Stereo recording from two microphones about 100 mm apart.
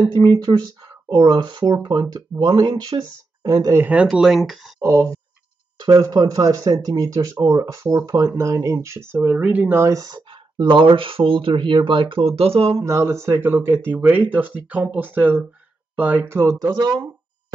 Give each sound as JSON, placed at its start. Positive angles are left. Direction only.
{"t": 0.1, "sound": "speech", "side_deg": -45}
{"t": 3.7, "sound": "speech", "side_deg": -15}
{"t": 4.8, "sound": "speech", "side_deg": -30}
{"t": 5.8, "sound": "speech", "side_deg": -45}
{"t": 10.0, "sound": "speech", "side_deg": -50}
{"t": 12.8, "sound": "speech", "side_deg": -30}
{"t": 16.5, "sound": "speech", "side_deg": -40}